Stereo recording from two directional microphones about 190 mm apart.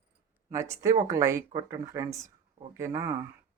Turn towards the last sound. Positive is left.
turn(degrees=-15)  # may be behind; listen again after turning